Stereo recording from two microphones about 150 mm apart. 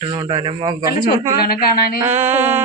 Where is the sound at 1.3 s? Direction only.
90° left.